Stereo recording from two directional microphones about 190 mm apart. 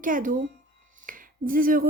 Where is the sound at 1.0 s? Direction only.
45° right (ahead or behind).